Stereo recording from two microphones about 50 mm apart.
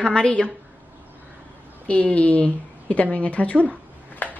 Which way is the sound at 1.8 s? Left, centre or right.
Left.